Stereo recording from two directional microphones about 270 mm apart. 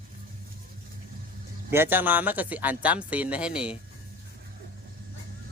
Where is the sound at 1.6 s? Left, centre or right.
Centre.